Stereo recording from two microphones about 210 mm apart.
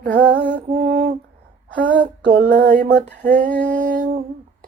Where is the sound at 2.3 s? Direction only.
40° right (ahead or behind).